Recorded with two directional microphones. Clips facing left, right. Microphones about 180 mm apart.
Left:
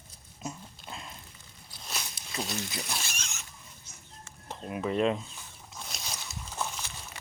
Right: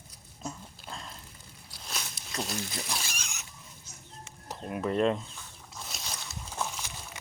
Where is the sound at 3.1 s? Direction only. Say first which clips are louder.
Even; 10° right (ahead or behind).